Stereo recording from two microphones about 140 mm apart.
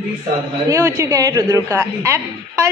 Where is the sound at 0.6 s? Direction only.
20° right (ahead or behind).